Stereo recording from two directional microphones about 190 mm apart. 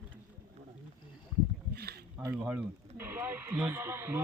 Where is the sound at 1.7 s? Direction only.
55° right (ahead or behind).